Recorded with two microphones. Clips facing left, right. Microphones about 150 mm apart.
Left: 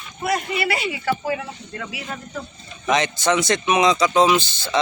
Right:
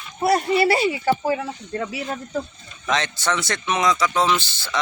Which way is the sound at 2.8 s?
15° left (ahead or behind).